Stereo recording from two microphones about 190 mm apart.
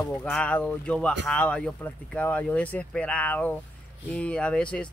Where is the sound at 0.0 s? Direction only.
5° left (ahead or behind).